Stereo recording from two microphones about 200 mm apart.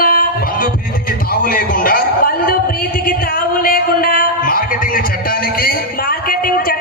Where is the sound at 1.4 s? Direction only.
45° left (ahead or behind).